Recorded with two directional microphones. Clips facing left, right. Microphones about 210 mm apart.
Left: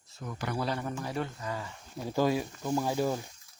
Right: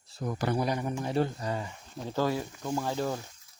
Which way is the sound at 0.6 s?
15° right (ahead or behind).